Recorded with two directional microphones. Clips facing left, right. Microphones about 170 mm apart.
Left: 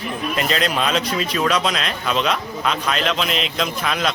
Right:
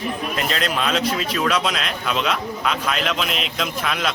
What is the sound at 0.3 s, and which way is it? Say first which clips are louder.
Speech: left 4 dB; centre (ahead or behind).